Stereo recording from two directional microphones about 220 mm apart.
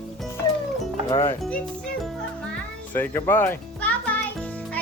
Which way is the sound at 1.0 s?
15° left (ahead or behind).